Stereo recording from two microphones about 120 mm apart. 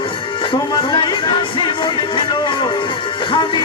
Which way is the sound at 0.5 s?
45° left (ahead or behind).